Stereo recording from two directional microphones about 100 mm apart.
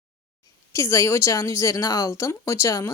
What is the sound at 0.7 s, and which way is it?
A woman's voice, 30° left (ahead or behind).